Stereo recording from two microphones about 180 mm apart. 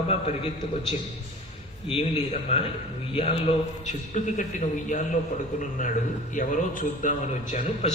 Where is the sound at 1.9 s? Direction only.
35° left (ahead or behind).